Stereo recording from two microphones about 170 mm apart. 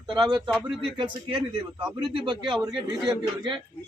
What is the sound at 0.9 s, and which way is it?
Speech, 30° right (ahead or behind).